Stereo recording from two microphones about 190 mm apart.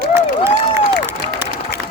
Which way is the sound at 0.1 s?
15° right (ahead or behind).